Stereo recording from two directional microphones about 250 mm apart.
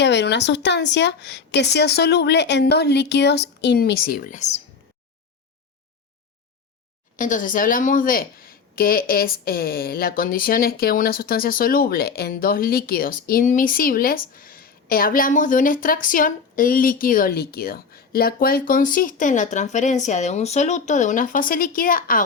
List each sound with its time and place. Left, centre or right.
0.0 s a woman's voice: left
7.2 s a woman's voice: left